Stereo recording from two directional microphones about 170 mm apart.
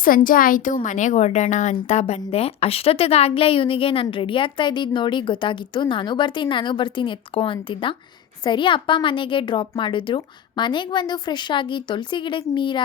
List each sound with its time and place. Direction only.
0.0 s a woman's voice: 55° left (ahead or behind); by 12.8 s 30° left (ahead or behind)